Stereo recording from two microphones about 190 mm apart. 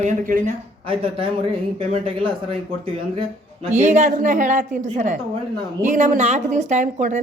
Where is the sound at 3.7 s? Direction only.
40° right (ahead or behind).